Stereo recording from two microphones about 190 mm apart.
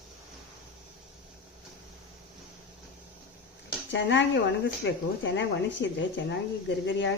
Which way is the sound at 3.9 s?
70° left (ahead or behind).